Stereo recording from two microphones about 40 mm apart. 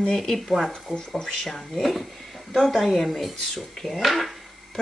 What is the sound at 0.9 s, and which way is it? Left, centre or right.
Speech, centre.